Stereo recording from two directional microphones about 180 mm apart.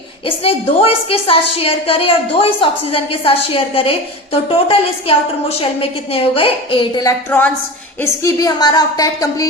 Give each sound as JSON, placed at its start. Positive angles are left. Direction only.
{"t": 0.3, "sound": "a woman's voice", "side_deg": 30}
{"t": 7.3, "sound": "a woman's voice", "side_deg": 10}